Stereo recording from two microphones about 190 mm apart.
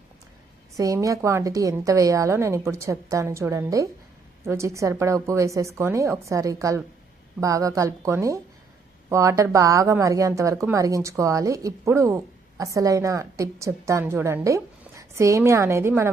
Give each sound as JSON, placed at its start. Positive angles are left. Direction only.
{"t": 0.8, "sound": "a woman's voice", "side_deg": -15}